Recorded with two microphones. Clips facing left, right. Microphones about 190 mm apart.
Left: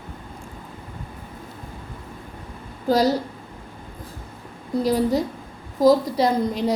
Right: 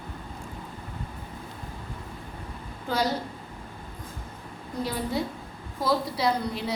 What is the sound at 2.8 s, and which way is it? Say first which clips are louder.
Speech: left 9 dB; 40° left (ahead or behind).